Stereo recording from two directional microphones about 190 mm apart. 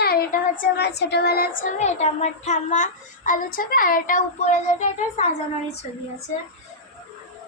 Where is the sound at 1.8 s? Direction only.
35° left (ahead or behind).